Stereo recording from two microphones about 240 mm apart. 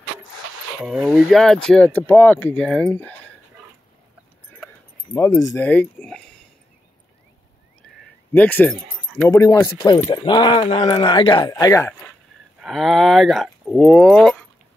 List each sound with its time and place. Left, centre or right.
0.7 s speech: centre
5.1 s speech: centre
8.3 s speech: centre
12.6 s speech: centre